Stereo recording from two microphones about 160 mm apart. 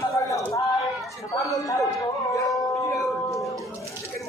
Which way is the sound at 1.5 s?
20° left (ahead or behind).